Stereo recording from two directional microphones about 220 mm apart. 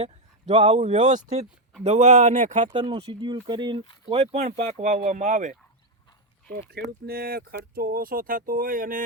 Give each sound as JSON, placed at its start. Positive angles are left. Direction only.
{"t": 0.0, "sound": "speech", "side_deg": -30}
{"t": 2.6, "sound": "speech", "side_deg": -20}
{"t": 6.5, "sound": "speech", "side_deg": -45}